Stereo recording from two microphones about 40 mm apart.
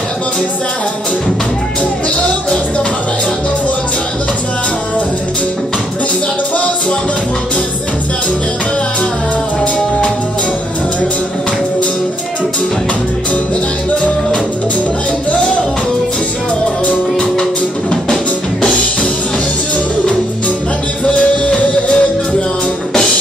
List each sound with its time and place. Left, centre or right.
21.0 s music: left